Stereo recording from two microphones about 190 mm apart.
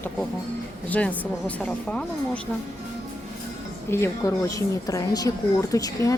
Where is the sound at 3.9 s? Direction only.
15° left (ahead or behind).